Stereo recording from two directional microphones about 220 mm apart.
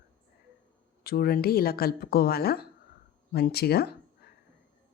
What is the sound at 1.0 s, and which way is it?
Speech, 45° left (ahead or behind).